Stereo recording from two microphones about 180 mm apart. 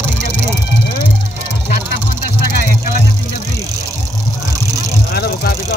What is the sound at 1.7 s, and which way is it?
Vehicle, 50° left (ahead or behind).